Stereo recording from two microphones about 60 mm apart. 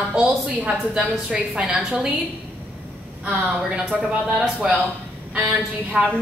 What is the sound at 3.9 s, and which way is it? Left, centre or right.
Speech, right.